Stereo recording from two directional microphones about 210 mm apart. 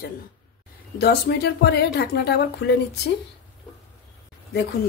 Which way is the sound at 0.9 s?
50° left (ahead or behind).